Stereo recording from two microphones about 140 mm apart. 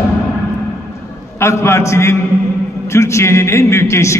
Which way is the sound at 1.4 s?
20° left (ahead or behind).